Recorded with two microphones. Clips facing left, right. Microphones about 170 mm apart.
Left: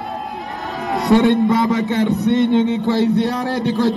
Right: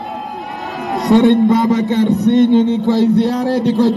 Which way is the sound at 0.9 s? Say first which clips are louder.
Right 3 dB; 20° right (ahead or behind).